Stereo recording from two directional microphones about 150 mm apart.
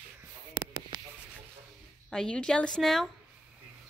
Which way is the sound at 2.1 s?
5° left (ahead or behind).